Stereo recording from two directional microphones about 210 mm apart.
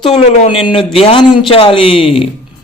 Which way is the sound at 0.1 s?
30° left (ahead or behind).